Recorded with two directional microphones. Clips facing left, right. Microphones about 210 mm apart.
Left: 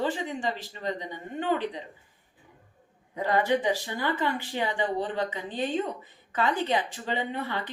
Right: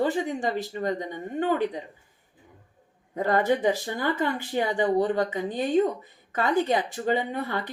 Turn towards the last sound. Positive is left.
turn(degrees=-45)  # may be behind; listen again after turning